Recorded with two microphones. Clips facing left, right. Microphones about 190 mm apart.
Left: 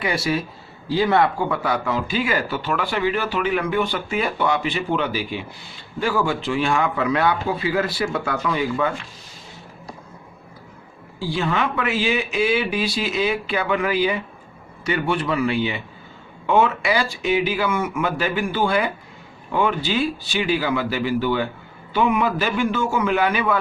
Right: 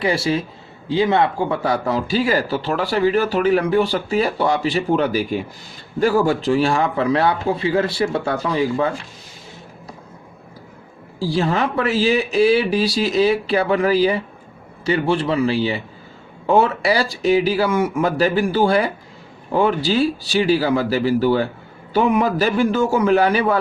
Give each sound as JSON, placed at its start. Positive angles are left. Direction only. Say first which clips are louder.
{"t": 0.0, "sound": "speech", "louder": "right 3 dB", "side_deg": -30}
{"t": 11.2, "sound": "speech", "louder": "right 3 dB", "side_deg": -35}